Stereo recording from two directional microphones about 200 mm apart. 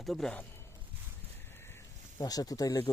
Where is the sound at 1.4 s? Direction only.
10° left (ahead or behind).